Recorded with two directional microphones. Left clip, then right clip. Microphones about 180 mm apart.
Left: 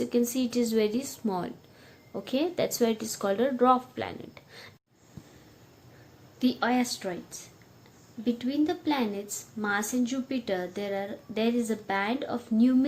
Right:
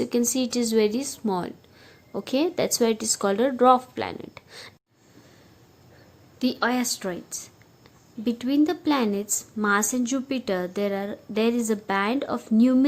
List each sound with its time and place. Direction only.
0.0 s a woman's voice: 30° right (ahead or behind)
6.4 s a woman's voice: 30° right (ahead or behind)